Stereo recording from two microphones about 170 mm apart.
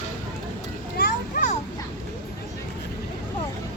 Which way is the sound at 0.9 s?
65° left (ahead or behind).